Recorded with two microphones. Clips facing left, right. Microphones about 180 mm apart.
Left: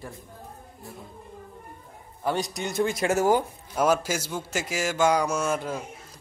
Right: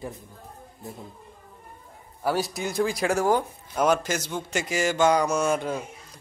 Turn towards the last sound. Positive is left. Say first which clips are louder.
# right 3 dB
turn(degrees=0)  # may be behind; listen again after turning